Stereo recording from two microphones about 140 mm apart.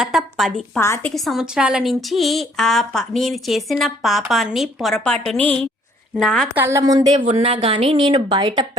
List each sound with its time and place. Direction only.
0.0 s a woman's voice: centre (ahead or behind)
0.8 s a woman's voice: 20° left (ahead or behind)
1.1 s a woman's voice: centre (ahead or behind)
6.5 s speech: 15° right (ahead or behind)
7.3 s a woman's voice: 45° right (ahead or behind)